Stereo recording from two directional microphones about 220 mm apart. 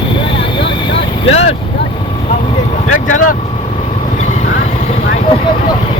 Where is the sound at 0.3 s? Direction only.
25° left (ahead or behind).